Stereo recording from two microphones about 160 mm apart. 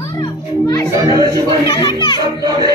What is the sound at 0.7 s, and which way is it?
A child's voice, 25° left (ahead or behind).